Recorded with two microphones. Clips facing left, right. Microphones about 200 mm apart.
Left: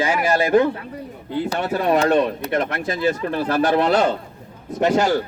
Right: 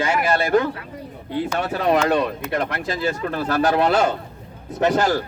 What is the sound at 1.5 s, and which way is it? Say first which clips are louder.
Speech: left 1 dB; 35° left (ahead or behind).